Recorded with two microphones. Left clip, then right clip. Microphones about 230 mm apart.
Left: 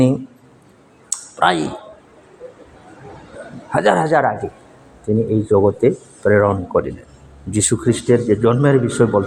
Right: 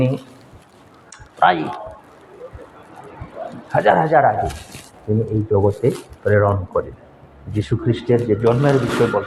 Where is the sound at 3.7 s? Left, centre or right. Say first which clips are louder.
Even; left.